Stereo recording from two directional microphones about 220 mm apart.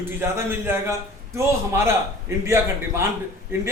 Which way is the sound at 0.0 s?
10° right (ahead or behind).